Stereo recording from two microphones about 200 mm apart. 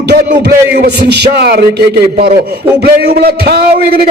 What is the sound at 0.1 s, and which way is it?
Music, 50° right (ahead or behind).